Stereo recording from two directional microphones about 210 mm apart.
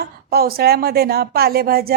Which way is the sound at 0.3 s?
45° right (ahead or behind).